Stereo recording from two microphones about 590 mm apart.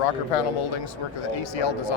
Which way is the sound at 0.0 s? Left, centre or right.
Left.